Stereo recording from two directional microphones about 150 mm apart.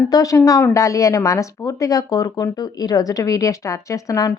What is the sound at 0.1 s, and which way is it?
A woman's voice, 20° left (ahead or behind).